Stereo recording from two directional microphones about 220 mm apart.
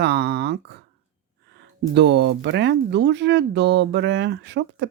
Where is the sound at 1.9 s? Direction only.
50° right (ahead or behind).